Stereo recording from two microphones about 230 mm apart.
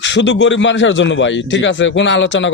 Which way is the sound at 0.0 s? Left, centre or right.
Left.